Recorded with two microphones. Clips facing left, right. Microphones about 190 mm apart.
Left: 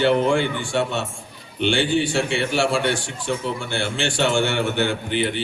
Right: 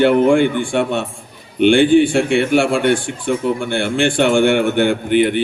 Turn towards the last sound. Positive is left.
turn(degrees=-55)  # may be behind; listen again after turning